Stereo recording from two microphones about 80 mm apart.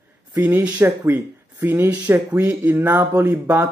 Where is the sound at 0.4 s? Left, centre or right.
Right.